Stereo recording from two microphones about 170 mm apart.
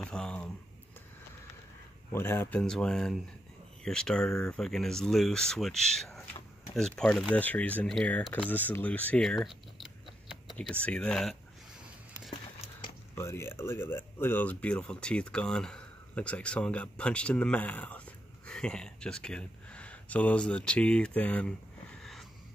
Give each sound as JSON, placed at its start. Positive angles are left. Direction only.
{"t": 0.0, "sound": "speech", "side_deg": 5}
{"t": 2.1, "sound": "speech", "side_deg": 15}
{"t": 13.1, "sound": "speech", "side_deg": 15}